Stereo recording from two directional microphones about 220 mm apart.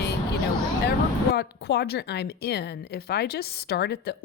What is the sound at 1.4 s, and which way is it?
A woman's voice, 45° left (ahead or behind).